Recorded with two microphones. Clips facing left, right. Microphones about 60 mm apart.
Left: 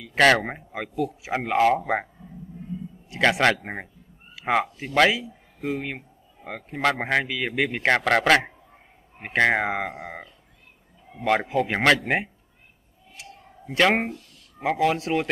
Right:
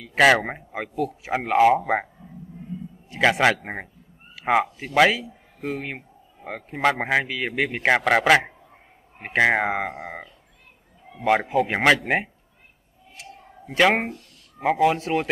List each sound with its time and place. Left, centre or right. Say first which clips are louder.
0.0 s speech: right 1 dB; centre
3.1 s speech: right 1 dB; centre
11.4 s speech: right 1 dB; centre
13.1 s a sound: right 2 dB; centre
14.6 s speech: right 3 dB; centre